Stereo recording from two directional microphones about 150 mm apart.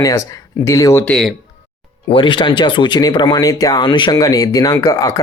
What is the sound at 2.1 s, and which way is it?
Speech, 35° left (ahead or behind).